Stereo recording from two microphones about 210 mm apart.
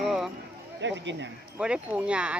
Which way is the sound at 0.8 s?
60° right (ahead or behind).